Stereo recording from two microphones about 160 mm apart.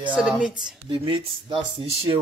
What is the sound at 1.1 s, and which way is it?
Speech, 35° right (ahead or behind).